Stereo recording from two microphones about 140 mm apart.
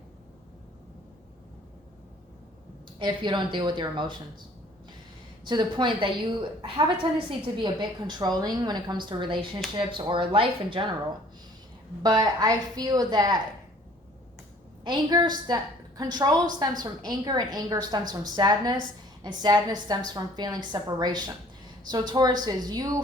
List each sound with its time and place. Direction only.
3.0 s a woman's voice: 35° right (ahead or behind)
5.5 s a woman's voice: 35° right (ahead or behind)
12.0 s a woman's voice: 30° right (ahead or behind)
14.8 s a woman's voice: 30° right (ahead or behind)